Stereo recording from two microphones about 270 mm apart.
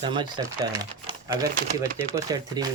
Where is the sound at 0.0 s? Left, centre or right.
Centre.